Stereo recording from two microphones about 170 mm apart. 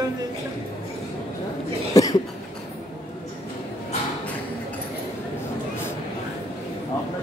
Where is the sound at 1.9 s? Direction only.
20° left (ahead or behind).